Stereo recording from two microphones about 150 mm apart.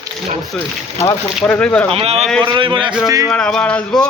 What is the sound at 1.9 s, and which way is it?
Speech, 40° right (ahead or behind).